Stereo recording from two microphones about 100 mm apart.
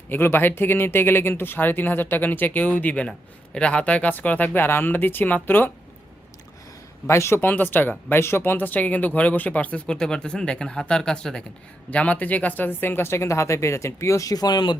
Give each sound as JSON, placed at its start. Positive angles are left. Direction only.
{"t": 0.1, "sound": "speech", "side_deg": 20}
{"t": 7.1, "sound": "speech", "side_deg": 25}